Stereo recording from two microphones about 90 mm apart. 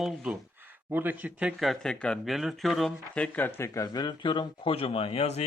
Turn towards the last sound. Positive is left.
turn(degrees=90)